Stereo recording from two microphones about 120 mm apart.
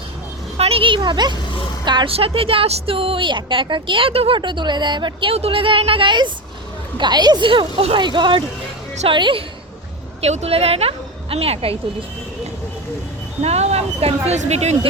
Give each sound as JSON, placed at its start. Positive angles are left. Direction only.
{"t": 0.5, "sound": "a woman's voice", "side_deg": -55}
{"t": 2.0, "sound": "a woman's voice", "side_deg": -55}
{"t": 4.4, "sound": "a woman's voice", "side_deg": -40}
{"t": 5.3, "sound": "a woman's voice", "side_deg": -55}
{"t": 10.2, "sound": "a woman's voice", "side_deg": -60}
{"t": 13.4, "sound": "a woman's voice", "side_deg": -65}